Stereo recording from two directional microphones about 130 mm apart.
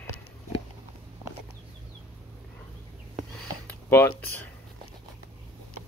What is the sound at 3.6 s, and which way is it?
Speech, 20° left (ahead or behind).